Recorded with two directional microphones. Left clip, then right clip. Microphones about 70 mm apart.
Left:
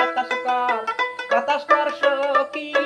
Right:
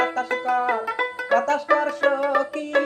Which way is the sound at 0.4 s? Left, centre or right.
Right.